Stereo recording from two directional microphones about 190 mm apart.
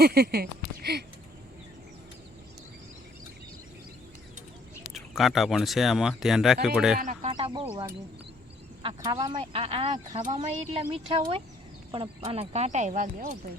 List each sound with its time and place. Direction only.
0.0 s speech: 55° right (ahead or behind)
4.9 s speech: centre (ahead or behind)
7.0 s speech: 40° right (ahead or behind)
7.3 s speech: 25° right (ahead or behind)